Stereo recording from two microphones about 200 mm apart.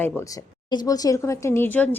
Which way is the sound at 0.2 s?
15° left (ahead or behind).